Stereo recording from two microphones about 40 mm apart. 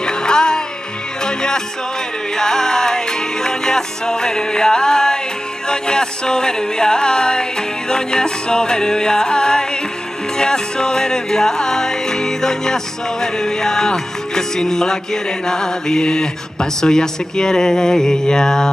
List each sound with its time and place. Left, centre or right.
0.0 s music: centre